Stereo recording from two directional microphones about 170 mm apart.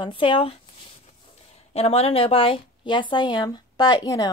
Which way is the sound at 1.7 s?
35° left (ahead or behind).